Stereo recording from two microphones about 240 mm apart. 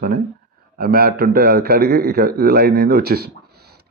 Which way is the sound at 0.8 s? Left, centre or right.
Right.